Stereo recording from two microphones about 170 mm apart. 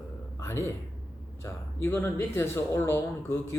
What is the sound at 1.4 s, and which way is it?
A man's voice, 15° left (ahead or behind).